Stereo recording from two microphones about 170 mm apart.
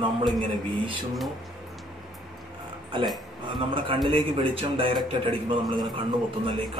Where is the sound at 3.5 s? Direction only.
30° right (ahead or behind).